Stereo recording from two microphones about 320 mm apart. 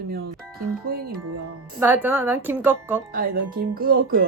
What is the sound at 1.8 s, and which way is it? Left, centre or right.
A woman's voice, centre.